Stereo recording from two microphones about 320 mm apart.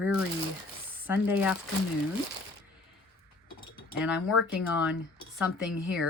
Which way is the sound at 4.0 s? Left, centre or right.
Centre.